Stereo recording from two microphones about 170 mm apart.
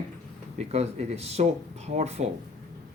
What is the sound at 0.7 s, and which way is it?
Speech, 40° right (ahead or behind).